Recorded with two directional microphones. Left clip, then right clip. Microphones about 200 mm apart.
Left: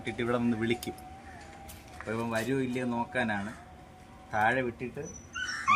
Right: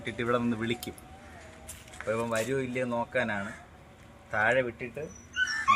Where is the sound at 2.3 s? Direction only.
10° right (ahead or behind).